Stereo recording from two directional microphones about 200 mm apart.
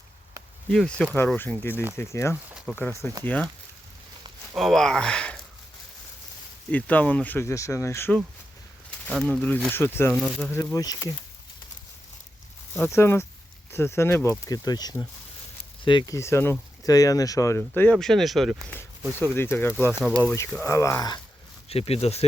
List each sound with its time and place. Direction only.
0.7 s speech: 5° left (ahead or behind)
4.5 s speech: centre (ahead or behind)
6.7 s speech: 5° left (ahead or behind)
12.7 s speech: 10° left (ahead or behind)
19.2 s speech: 10° left (ahead or behind)
19.9 s speech: 5° right (ahead or behind)
20.5 s speech: 10° left (ahead or behind)
21.7 s speech: 30° left (ahead or behind)